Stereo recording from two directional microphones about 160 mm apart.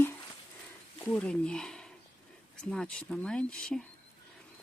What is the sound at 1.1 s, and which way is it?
Speech, 5° left (ahead or behind).